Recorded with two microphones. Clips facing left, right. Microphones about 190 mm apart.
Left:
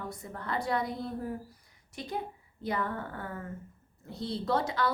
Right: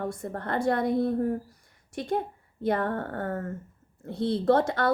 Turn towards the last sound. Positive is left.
turn(degrees=-50)  # may be behind; listen again after turning